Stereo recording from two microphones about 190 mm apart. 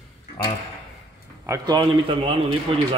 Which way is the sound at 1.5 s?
20° right (ahead or behind).